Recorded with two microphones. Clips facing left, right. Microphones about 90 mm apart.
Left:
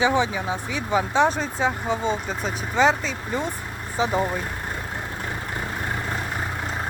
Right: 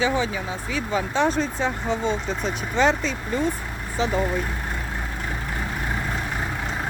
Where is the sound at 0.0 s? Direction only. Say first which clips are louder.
Left 2 dB; 20° left (ahead or behind); by 3.2 s centre (ahead or behind).